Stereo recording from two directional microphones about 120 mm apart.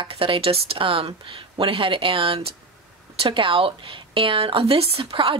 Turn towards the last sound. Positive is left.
turn(degrees=-45)  # may be behind; listen again after turning